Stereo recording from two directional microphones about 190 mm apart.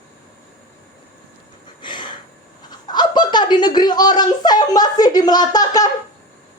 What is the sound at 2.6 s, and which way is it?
Speech, 20° left (ahead or behind).